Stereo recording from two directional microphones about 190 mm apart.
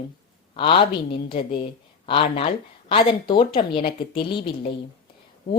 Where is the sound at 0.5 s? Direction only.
25° left (ahead or behind).